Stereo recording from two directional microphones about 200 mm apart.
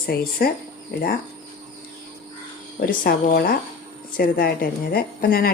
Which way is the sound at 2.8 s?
45° left (ahead or behind).